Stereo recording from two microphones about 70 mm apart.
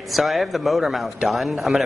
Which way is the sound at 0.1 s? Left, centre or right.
Centre.